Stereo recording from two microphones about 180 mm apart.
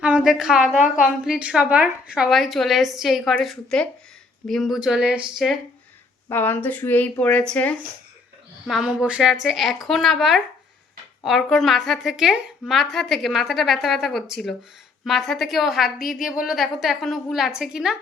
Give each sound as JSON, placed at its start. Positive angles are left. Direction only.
{"t": 0.0, "sound": "a woman's voice", "side_deg": -5}
{"t": 0.8, "sound": "a woman's voice", "side_deg": 50}
{"t": 1.2, "sound": "a woman's voice", "side_deg": -5}
{"t": 6.2, "sound": "a woman's voice", "side_deg": 10}